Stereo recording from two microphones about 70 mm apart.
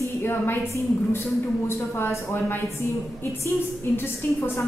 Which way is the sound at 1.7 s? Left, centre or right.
Left.